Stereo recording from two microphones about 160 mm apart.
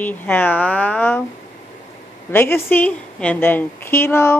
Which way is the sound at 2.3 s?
15° left (ahead or behind).